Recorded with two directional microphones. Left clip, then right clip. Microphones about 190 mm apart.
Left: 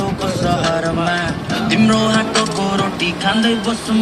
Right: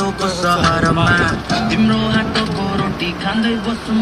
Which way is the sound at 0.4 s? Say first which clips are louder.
Right 3 dB; 45° right (ahead or behind).